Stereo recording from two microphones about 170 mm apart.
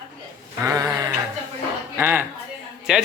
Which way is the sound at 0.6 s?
20° right (ahead or behind).